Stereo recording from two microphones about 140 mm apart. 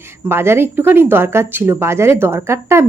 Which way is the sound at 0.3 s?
15° right (ahead or behind).